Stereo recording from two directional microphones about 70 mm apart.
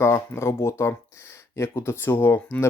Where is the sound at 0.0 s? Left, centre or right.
Left.